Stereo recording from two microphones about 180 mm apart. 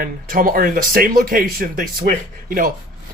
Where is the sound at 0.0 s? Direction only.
50° right (ahead or behind).